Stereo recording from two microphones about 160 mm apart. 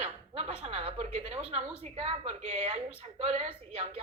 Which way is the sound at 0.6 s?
40° right (ahead or behind).